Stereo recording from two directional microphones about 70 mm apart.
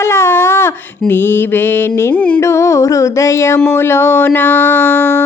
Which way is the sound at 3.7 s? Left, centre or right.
Left.